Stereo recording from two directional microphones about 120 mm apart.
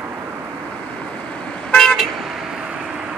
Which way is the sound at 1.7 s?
5° left (ahead or behind).